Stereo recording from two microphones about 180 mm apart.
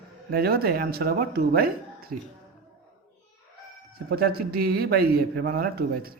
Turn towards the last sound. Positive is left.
turn(degrees=-55)  # may be behind; listen again after turning